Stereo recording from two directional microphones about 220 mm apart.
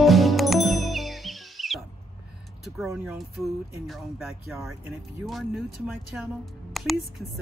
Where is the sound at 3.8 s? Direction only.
5° right (ahead or behind).